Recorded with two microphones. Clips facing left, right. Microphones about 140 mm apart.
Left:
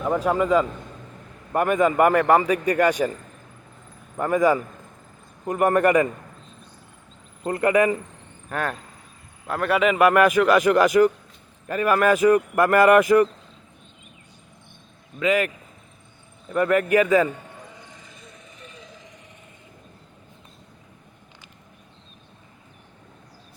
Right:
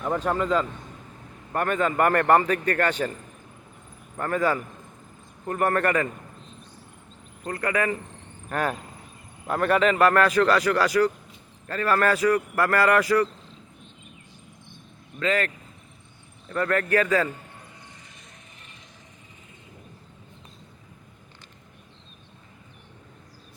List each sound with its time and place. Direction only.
0.0 s a man's voice: 5° left (ahead or behind)
4.2 s a man's voice: 10° left (ahead or behind)
7.4 s a man's voice: 20° left (ahead or behind)
8.4 s a man's voice: centre (ahead or behind); by 13.2 s 20° left (ahead or behind)
15.2 s a man's voice: 15° left (ahead or behind)